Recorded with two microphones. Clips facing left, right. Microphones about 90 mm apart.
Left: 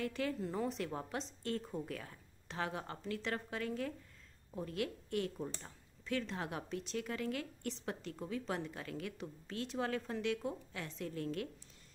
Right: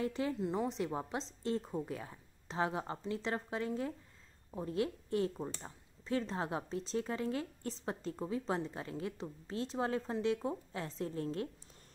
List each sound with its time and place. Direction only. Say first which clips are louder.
0.0 s speech: right 3 dB; 25° right (ahead or behind)